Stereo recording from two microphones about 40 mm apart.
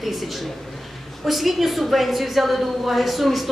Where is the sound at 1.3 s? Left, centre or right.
Centre.